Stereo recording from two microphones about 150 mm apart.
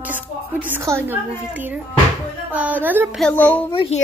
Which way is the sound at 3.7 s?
35° left (ahead or behind).